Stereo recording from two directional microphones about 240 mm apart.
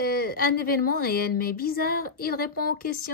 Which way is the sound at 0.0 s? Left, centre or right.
Left.